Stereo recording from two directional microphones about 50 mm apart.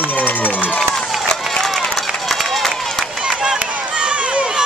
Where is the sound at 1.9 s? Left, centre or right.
Centre.